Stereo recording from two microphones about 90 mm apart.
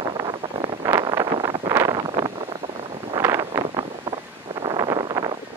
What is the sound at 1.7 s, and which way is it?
Wind noise, 40° right (ahead or behind).